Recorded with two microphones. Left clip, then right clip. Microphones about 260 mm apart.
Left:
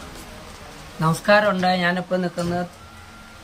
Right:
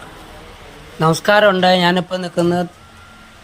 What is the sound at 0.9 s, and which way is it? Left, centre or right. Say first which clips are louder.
Speech: right 4 dB; centre.